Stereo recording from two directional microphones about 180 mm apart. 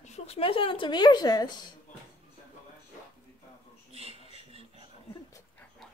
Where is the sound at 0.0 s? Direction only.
35° left (ahead or behind).